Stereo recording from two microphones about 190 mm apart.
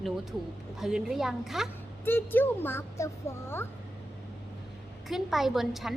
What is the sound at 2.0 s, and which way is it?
A child's voice, 10° left (ahead or behind).